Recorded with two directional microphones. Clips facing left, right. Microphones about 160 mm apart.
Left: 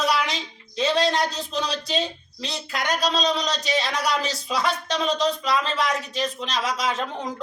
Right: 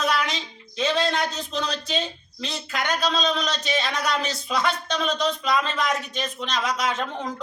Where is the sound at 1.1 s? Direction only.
35° left (ahead or behind).